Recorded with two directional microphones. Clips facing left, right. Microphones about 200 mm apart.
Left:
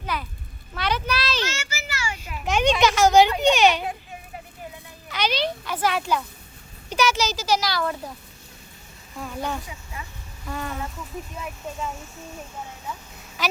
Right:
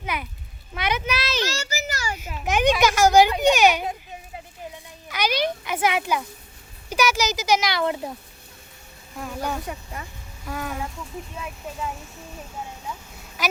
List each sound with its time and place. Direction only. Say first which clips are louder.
0.0 s a sound: even; 15° right (ahead or behind)
1.5 s children playing: right 3 dB; 40° right (ahead or behind)
2.1 s children playing: right 1 dB; 20° right (ahead or behind)
2.4 s speech: even; 5° right (ahead or behind)
3.2 s a child's voice: right 1 dB; 15° right (ahead or behind)
5.0 s a child's voice: right 1 dB; 15° right (ahead or behind)
9.1 s a child's voice: right 1 dB; 5° right (ahead or behind)
9.6 s speech: right 5 dB; 50° right (ahead or behind)
10.4 s a child's voice: right 1 dB; 5° right (ahead or behind)